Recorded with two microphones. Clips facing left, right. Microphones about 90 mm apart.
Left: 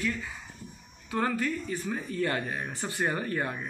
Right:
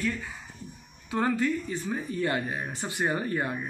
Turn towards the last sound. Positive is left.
turn(degrees=-20)  # may be behind; listen again after turning